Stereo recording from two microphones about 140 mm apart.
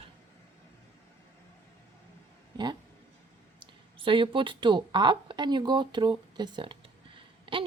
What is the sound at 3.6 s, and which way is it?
Speech, 35° right (ahead or behind).